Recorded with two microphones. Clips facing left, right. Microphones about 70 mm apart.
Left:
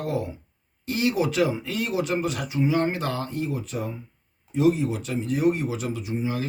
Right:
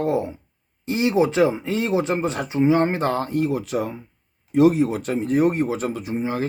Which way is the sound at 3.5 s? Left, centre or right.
Right.